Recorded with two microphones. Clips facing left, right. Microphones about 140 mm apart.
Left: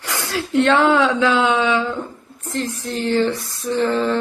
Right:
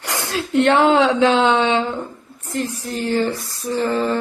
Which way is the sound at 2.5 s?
10° right (ahead or behind).